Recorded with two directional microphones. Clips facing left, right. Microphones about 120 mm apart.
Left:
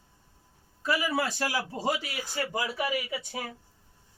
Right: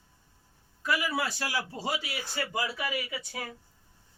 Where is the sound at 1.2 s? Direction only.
45° left (ahead or behind).